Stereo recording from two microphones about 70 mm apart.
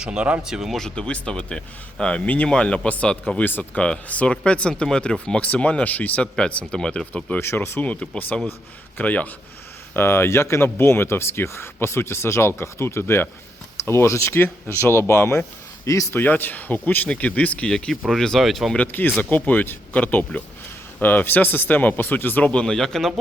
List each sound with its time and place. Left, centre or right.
0.0 s speech: centre
0.8 s speech: centre
6.3 s speech: centre
7.3 s speech: left
7.8 s speech: centre
18.9 s speech: left; by 23.1 s centre